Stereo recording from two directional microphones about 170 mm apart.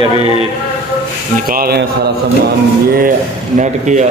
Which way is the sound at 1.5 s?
60° right (ahead or behind).